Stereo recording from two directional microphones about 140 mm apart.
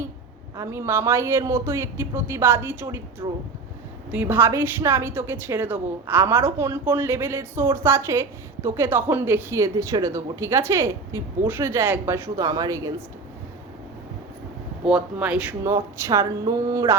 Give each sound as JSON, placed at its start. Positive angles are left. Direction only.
{"t": 0.5, "sound": "a woman's voice", "side_deg": -20}
{"t": 14.8, "sound": "speech", "side_deg": -5}
{"t": 15.6, "sound": "a woman's voice", "side_deg": -20}